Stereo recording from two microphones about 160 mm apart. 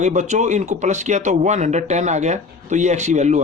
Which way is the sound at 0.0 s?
50° right (ahead or behind).